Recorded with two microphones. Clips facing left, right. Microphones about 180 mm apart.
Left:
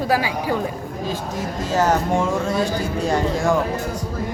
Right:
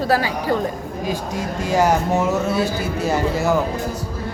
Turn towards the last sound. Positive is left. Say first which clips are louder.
# even
turn(degrees=-5)  # may be behind; listen again after turning